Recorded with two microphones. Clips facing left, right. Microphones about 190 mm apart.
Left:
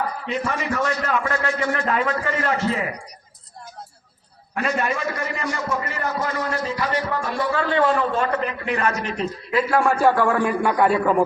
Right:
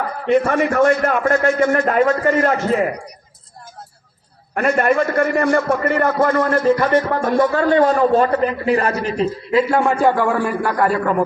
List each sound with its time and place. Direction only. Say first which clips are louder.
0.3 s a man's voice: right 13 dB; 55° right (ahead or behind)
4.5 s a man's voice: right 8 dB; 55° right (ahead or behind); by 11.2 s centre (ahead or behind)